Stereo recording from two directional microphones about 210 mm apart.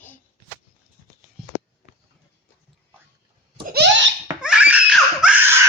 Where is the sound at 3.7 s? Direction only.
55° right (ahead or behind).